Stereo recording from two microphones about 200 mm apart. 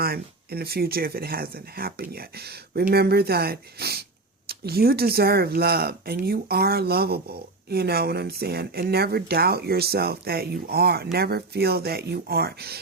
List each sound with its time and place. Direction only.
0.0 s speech: 50° right (ahead or behind)